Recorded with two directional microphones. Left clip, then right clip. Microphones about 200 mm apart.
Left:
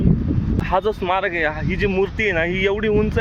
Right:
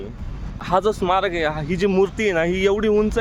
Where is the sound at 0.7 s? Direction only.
15° right (ahead or behind).